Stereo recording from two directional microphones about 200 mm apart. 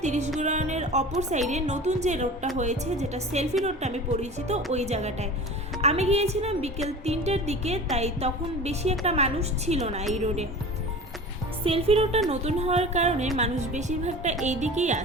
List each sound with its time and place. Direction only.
0.0 s music: 35° right (ahead or behind)
0.3 s a woman's voice: 35° right (ahead or behind)
11.6 s a woman's voice: 30° right (ahead or behind)